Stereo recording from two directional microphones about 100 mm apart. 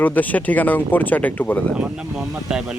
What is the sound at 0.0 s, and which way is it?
Speech, 15° left (ahead or behind).